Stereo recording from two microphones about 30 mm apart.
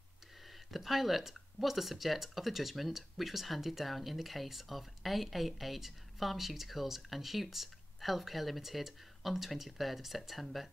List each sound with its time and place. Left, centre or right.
0.7 s speech: centre